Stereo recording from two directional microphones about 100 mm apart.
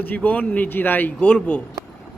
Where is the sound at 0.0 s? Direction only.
15° left (ahead or behind).